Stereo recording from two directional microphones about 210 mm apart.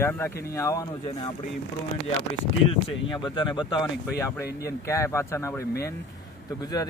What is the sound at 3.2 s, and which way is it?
Speech, 20° left (ahead or behind).